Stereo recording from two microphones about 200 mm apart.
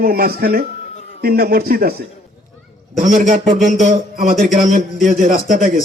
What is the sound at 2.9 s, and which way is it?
A man's voice, 40° right (ahead or behind).